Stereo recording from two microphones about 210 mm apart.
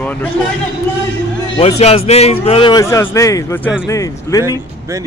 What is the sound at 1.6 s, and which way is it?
A man's voice, 30° left (ahead or behind).